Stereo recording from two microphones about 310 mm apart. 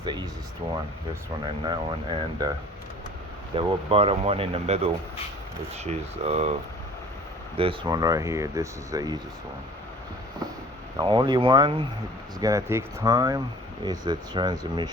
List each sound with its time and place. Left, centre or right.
0.0 s speech: centre
1.6 s speech: centre
3.5 s speech: centre
10.9 s speech: centre